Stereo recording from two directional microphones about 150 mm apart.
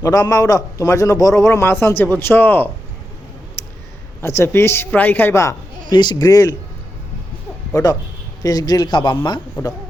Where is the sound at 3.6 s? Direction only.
15° left (ahead or behind).